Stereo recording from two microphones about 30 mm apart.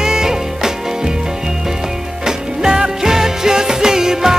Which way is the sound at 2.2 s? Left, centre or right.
Right.